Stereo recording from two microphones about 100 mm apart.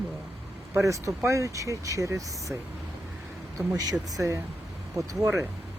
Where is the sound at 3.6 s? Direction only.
35° right (ahead or behind).